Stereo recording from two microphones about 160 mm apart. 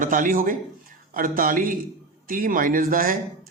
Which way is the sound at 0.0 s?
60° right (ahead or behind).